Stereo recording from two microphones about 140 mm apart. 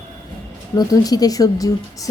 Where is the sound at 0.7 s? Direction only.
25° left (ahead or behind).